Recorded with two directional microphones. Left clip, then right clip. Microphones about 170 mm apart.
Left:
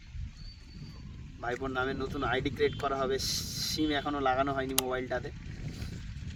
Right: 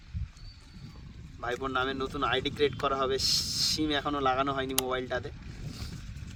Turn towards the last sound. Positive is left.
turn(degrees=-10)  # may be behind; listen again after turning